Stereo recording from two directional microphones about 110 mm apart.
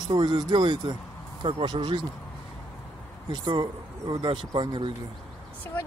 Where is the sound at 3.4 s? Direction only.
40° right (ahead or behind).